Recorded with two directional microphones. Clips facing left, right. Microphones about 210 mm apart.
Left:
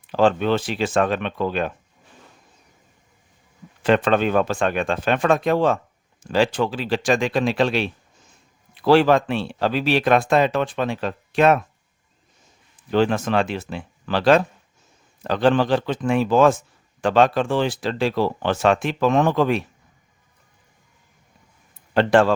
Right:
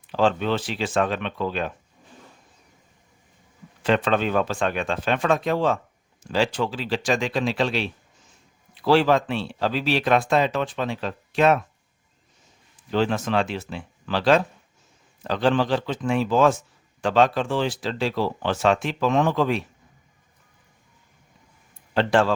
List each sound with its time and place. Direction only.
0.1 s speech: 50° left (ahead or behind)
3.8 s speech: 50° left (ahead or behind)
12.9 s speech: 55° left (ahead or behind)
21.9 s speech: 50° left (ahead or behind)